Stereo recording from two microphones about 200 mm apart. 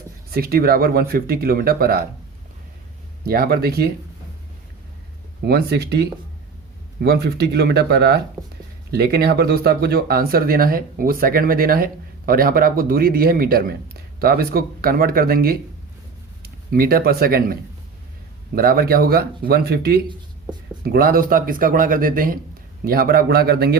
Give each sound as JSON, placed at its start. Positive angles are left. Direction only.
{"t": 0.3, "sound": "speech", "side_deg": -50}
{"t": 3.2, "sound": "speech", "side_deg": -50}
{"t": 5.5, "sound": "a man's voice", "side_deg": -55}